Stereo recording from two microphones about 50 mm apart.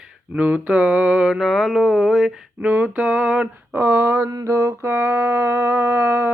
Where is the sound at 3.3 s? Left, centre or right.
Right.